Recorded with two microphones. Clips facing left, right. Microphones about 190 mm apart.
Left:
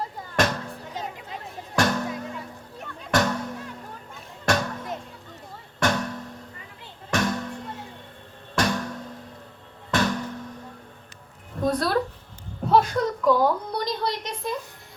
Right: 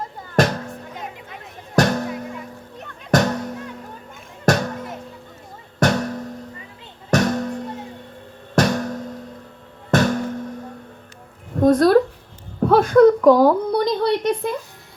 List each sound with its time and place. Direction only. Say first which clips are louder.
0.7 s music: right 1 dB; 35° left (ahead or behind)
1.7 s music: right 5 dB; 40° right (ahead or behind)
3.1 s music: right 5 dB; 40° right (ahead or behind)
4.5 s music: right 6 dB; 40° right (ahead or behind)
5.8 s music: right 6 dB; 40° right (ahead or behind)
11.6 s speech: right 10 dB; 45° right (ahead or behind)
12.5 s a sound: right 8 dB; 55° right (ahead or behind)